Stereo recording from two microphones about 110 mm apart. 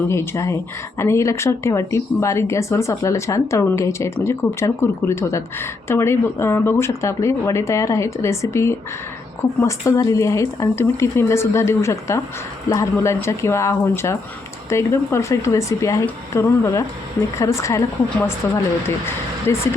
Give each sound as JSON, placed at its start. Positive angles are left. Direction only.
{"t": 0.1, "sound": "speech", "side_deg": 25}
{"t": 19.5, "sound": "speech", "side_deg": 25}